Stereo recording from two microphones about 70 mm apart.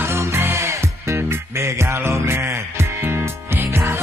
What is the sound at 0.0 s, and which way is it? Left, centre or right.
Music, right.